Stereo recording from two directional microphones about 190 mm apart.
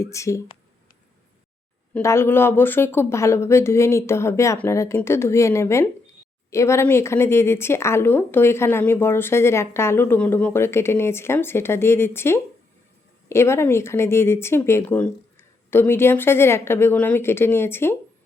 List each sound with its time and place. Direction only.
0.0 s a woman's voice: 15° left (ahead or behind)
1.9 s a woman's voice: 15° left (ahead or behind)